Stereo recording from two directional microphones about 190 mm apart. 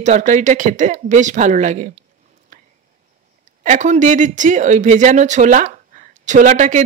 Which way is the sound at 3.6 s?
40° right (ahead or behind).